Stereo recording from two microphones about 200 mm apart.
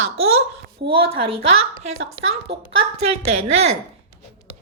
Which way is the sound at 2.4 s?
30° right (ahead or behind).